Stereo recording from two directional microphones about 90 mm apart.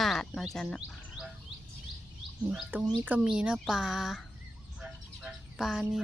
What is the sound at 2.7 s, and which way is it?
Speech, 25° right (ahead or behind).